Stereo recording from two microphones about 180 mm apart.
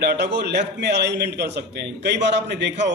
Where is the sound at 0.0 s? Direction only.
65° right (ahead or behind).